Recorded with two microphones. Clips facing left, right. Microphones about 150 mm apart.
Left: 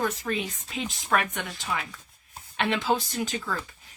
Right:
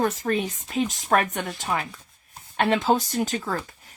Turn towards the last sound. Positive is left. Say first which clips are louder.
# right 4 dB
turn(degrees=-45)  # may be behind; listen again after turning